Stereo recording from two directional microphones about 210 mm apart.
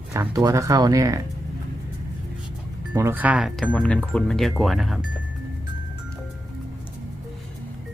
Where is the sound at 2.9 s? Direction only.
10° right (ahead or behind).